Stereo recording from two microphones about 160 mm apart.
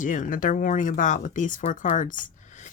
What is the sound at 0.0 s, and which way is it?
Speech, 55° left (ahead or behind).